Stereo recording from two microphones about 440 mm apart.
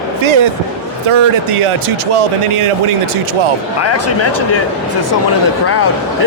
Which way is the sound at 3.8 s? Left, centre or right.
Left.